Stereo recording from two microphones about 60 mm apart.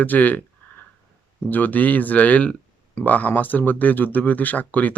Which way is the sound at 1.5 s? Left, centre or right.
Left.